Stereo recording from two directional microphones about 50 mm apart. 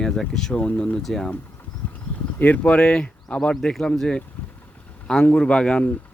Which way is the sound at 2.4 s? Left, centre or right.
Left.